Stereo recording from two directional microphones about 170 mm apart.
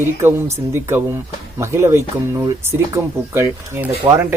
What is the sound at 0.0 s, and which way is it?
Speech, 15° right (ahead or behind).